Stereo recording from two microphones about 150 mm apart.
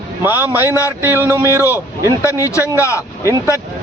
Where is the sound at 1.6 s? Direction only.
20° left (ahead or behind).